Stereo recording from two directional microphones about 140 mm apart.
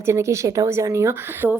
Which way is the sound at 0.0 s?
20° right (ahead or behind).